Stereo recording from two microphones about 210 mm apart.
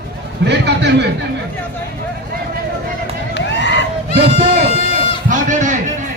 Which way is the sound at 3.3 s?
60° left (ahead or behind).